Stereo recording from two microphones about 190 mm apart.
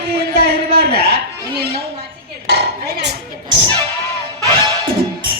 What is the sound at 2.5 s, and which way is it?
Speech, 60° right (ahead or behind).